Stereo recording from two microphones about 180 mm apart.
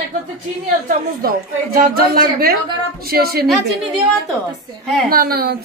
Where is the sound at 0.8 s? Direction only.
55° right (ahead or behind).